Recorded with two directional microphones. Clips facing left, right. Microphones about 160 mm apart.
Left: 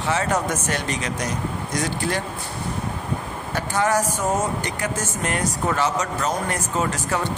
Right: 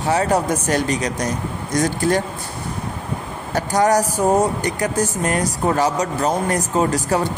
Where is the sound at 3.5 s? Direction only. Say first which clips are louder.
Right 5 dB; 40° right (ahead or behind).